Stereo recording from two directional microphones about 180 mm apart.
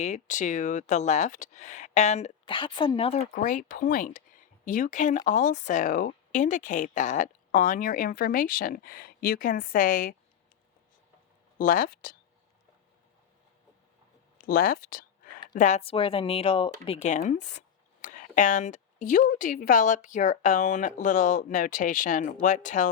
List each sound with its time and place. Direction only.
0.0 s speech: 40° left (ahead or behind)
3.3 s speech: 45° left (ahead or behind)
11.5 s speech: 50° left (ahead or behind)
14.3 s a sound: 55° left (ahead or behind)
15.5 s speech: 40° left (ahead or behind)